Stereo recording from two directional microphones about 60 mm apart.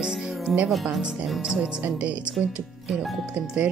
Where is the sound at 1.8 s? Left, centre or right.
Right.